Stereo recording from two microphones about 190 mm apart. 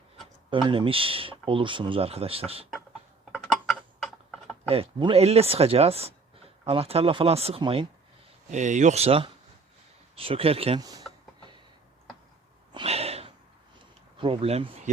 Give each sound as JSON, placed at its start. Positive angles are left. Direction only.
{"t": 0.5, "sound": "speech", "side_deg": -25}
{"t": 3.3, "sound": "a sound", "side_deg": 0}
{"t": 4.7, "sound": "speech", "side_deg": -25}
{"t": 8.4, "sound": "speech", "side_deg": -40}
{"t": 11.3, "sound": "tick-tock", "side_deg": -25}
{"t": 12.7, "sound": "snort", "side_deg": -30}
{"t": 14.2, "sound": "speech", "side_deg": -30}